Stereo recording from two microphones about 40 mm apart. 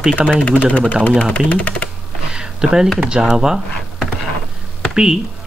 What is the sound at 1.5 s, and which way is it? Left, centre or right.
Speech, left.